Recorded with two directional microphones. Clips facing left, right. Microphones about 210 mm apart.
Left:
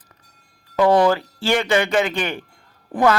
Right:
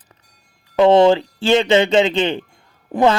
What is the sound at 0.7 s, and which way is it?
Speech, 25° right (ahead or behind).